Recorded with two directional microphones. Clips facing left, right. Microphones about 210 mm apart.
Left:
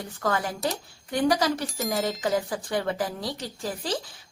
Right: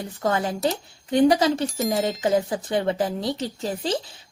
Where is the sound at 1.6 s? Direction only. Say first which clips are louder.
Right 4 dB; centre (ahead or behind).